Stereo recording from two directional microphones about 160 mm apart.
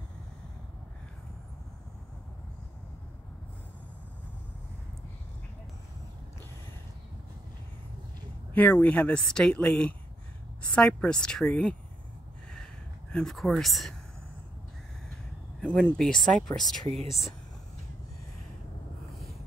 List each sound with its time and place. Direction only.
8.5 s a woman's voice: 10° left (ahead or behind)
13.1 s a woman's voice: 5° left (ahead or behind)
15.6 s a woman's voice: 5° left (ahead or behind)
16.8 s speech: 40° right (ahead or behind)